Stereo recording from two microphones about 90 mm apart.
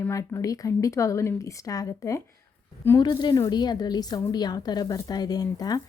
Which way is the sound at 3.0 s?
55° left (ahead or behind).